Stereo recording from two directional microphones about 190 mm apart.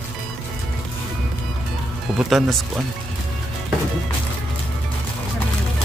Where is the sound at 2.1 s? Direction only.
Centre (ahead or behind).